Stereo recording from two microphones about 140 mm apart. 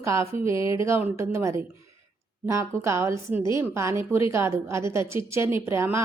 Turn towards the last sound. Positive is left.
turn(degrees=-20)  # may be behind; listen again after turning